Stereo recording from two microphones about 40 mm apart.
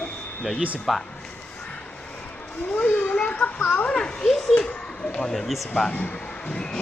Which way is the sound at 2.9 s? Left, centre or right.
Left.